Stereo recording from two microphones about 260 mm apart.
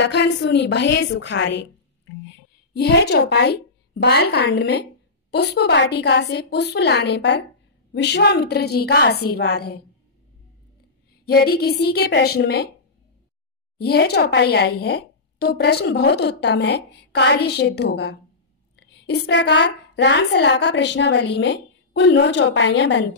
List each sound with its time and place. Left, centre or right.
0.0 s speech: left
2.7 s speech: left
11.2 s speech: left
13.7 s a woman's voice: left